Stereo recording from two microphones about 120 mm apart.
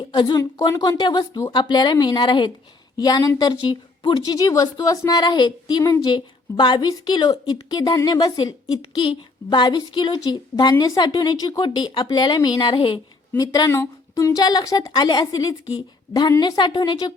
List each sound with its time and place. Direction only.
0.1 s a woman's voice: 40° left (ahead or behind)